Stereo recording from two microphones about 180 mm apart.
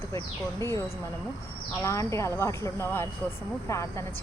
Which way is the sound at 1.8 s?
15° left (ahead or behind).